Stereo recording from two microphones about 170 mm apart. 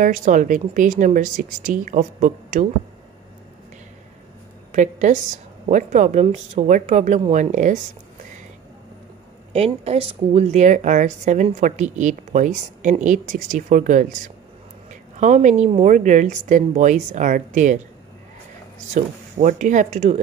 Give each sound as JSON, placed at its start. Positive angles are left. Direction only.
{"t": 0.0, "sound": "a woman's voice", "side_deg": -50}
{"t": 4.7, "sound": "a woman's voice", "side_deg": -45}
{"t": 9.5, "sound": "a woman's voice", "side_deg": -35}
{"t": 18.9, "sound": "a woman's voice", "side_deg": -45}